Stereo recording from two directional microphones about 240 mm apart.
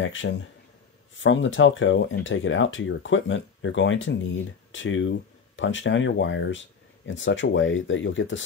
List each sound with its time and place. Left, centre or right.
0.0 s speech: left